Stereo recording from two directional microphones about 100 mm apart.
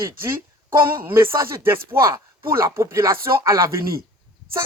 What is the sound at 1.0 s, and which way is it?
Speech, 25° right (ahead or behind).